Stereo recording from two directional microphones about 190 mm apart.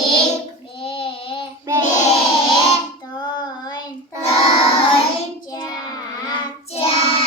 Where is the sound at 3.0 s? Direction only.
20° left (ahead or behind).